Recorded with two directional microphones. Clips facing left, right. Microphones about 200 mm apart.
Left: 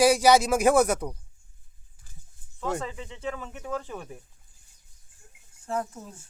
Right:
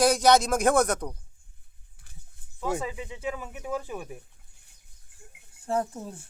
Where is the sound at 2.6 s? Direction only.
10° right (ahead or behind).